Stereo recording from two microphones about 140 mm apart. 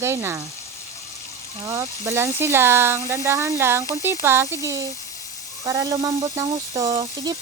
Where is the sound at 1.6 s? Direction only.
20° right (ahead or behind).